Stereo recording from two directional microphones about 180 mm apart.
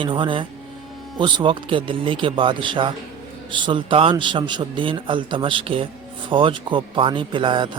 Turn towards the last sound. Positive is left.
turn(degrees=-25)  # may be behind; listen again after turning